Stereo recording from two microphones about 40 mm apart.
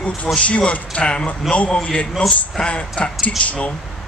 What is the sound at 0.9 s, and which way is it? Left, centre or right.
Speech, left.